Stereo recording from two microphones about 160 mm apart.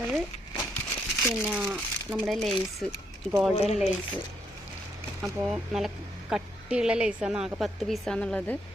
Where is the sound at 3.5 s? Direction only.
45° left (ahead or behind).